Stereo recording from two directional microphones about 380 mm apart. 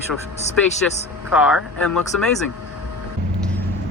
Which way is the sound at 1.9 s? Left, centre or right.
Left.